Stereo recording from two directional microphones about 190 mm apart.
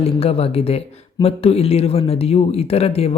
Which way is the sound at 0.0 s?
30° left (ahead or behind).